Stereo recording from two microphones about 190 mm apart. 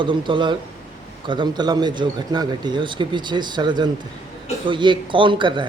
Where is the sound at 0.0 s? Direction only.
25° right (ahead or behind).